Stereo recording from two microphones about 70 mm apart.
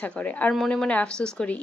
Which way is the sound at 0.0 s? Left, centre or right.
Centre.